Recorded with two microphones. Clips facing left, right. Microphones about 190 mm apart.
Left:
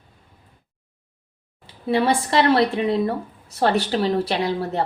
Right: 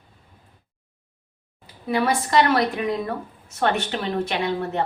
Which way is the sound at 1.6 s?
30° left (ahead or behind).